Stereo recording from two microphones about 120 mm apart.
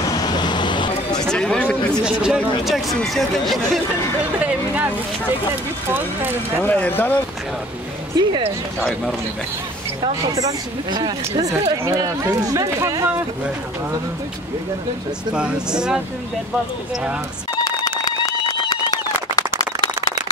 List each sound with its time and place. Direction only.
0.1 s vehicle: 35° left (ahead or behind)
1.2 s a sound: 5° left (ahead or behind)
2.0 s speech: 5° right (ahead or behind)
4.4 s a sound: 10° right (ahead or behind)
5.9 s speech: 15° right (ahead or behind)
6.6 s speech: 15° left (ahead or behind)
8.2 s speech: 35° right (ahead or behind)
10.2 s speech: 35° right (ahead or behind)
15.3 s speech: 10° right (ahead or behind)
17.6 s a sound: 30° left (ahead or behind)